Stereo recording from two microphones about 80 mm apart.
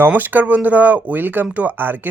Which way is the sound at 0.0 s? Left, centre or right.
Right.